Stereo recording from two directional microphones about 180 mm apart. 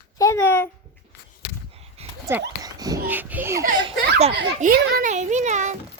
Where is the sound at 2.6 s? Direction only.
20° right (ahead or behind).